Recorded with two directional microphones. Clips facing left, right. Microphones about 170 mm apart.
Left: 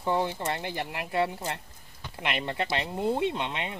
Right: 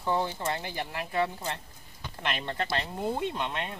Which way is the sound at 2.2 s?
15° left (ahead or behind).